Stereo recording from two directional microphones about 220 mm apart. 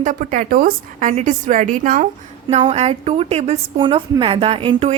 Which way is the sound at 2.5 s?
25° right (ahead or behind).